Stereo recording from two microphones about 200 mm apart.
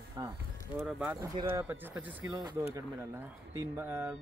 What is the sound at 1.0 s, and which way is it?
Speech, 20° right (ahead or behind).